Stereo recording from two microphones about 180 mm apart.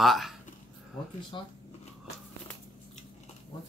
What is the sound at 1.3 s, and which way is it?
Speech, 25° left (ahead or behind).